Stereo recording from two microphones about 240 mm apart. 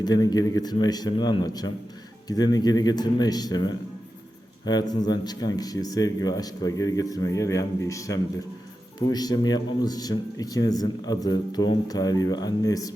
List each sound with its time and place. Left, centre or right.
0.0 s speech: centre